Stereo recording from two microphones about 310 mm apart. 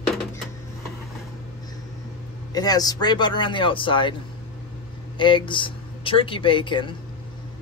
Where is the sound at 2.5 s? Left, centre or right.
Centre.